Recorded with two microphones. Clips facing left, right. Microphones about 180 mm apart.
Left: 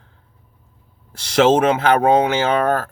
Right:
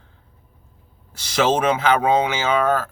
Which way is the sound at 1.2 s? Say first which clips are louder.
Left 5 dB; 55° left (ahead or behind).